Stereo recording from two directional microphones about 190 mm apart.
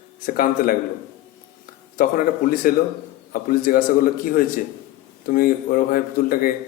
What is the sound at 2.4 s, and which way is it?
A man's voice, 45° left (ahead or behind).